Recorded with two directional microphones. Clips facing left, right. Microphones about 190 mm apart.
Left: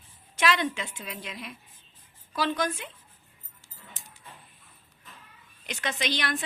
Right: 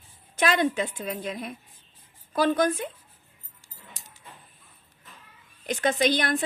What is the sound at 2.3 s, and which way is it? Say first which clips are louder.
Speech: right 6 dB; 50° right (ahead or behind).